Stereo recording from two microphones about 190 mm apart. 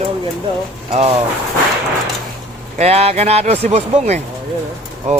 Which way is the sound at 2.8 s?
35° right (ahead or behind).